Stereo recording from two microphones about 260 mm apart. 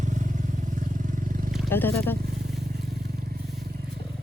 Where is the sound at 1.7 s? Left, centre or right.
Centre.